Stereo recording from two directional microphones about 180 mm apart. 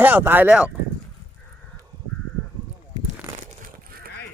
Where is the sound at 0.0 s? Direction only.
10° right (ahead or behind).